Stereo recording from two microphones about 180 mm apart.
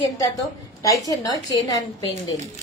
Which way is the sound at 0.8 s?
20° left (ahead or behind).